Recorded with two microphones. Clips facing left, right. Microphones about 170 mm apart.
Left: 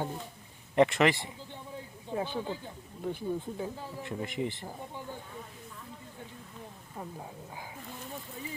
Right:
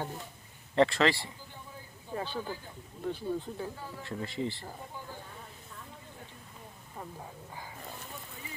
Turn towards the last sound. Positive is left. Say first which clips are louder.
# left 1 dB
turn(degrees=10)  # may be behind; listen again after turning